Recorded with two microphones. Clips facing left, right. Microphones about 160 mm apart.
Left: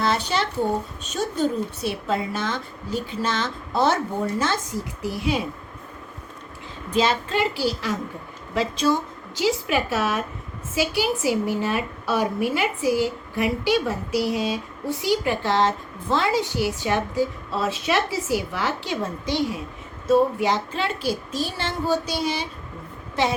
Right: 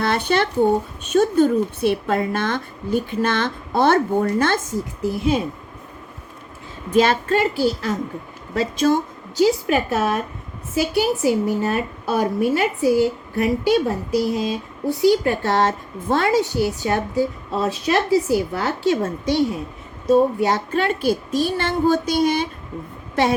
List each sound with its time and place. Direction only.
0.0 s speech: 55° right (ahead or behind)
6.9 s a woman's voice: 50° right (ahead or behind)